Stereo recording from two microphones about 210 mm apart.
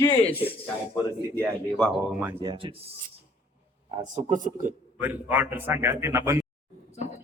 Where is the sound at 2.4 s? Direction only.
20° right (ahead or behind).